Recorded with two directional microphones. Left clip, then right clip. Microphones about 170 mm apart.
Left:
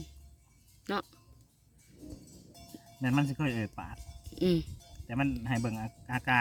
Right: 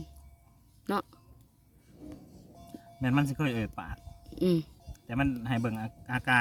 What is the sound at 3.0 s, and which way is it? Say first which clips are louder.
Speech: right 2 dB; 15° right (ahead or behind).